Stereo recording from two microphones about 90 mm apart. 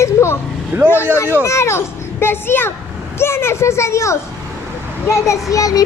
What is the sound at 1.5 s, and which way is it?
Speech, 30° left (ahead or behind).